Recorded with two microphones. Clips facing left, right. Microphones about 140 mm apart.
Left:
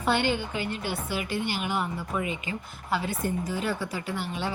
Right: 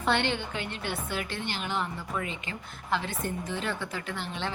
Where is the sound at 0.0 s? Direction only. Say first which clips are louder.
Left 2 dB; 5° left (ahead or behind).